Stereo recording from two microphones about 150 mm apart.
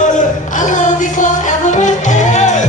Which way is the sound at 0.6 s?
55° left (ahead or behind).